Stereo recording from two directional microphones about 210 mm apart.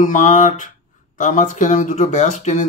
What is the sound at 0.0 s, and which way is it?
Speech, 35° left (ahead or behind).